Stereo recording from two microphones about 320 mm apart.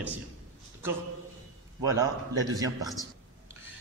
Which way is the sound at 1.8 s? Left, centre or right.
Centre.